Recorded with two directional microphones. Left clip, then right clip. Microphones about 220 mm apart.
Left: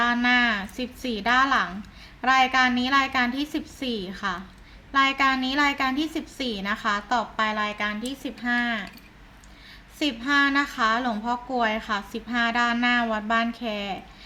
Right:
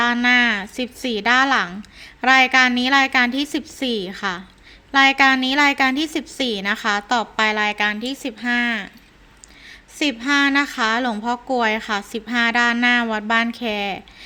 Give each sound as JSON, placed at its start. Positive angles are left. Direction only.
{"t": 0.0, "sound": "a woman's voice", "side_deg": -35}
{"t": 10.0, "sound": "a woman's voice", "side_deg": -35}